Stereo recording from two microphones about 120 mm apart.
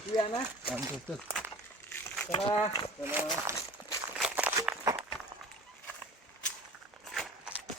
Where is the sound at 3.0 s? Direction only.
15° right (ahead or behind).